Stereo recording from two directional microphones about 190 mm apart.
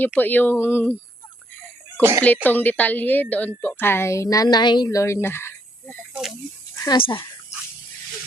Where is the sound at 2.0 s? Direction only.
15° right (ahead or behind).